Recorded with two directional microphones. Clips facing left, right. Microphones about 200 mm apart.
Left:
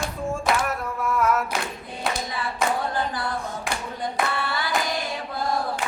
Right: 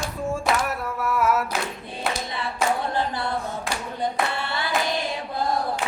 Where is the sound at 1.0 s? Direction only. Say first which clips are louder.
Even; 5° right (ahead or behind).